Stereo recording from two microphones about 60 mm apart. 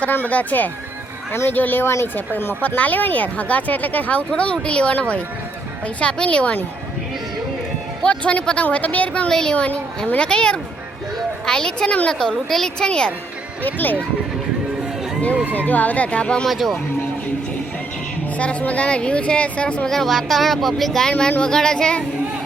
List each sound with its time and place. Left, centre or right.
0.0 s speech: left
8.0 s speech: left
9.3 s speech: centre
9.6 s speech: left
12.3 s speech: centre
13.7 s speech: left
15.5 s speech: left
16.5 s speech: centre
18.3 s speech: left; by 21.1 s centre
21.1 s speech: centre